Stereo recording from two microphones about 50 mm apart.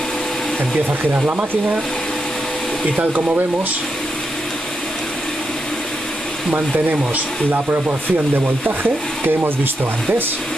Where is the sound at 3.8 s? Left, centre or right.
Centre.